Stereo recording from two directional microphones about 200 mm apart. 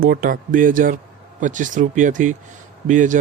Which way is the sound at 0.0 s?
45° right (ahead or behind).